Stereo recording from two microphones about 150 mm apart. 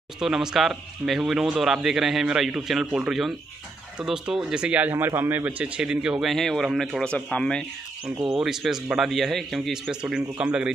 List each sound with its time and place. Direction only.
0.2 s speech: 5° right (ahead or behind)
8.0 s speech: 25° right (ahead or behind)
8.4 s a man's voice: 5° right (ahead or behind)